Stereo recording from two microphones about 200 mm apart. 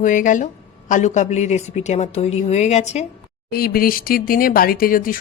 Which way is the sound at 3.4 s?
50° left (ahead or behind).